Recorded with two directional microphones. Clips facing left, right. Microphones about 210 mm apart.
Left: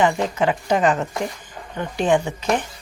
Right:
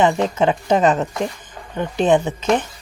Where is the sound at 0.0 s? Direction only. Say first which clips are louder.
Right 3 dB; 20° right (ahead or behind).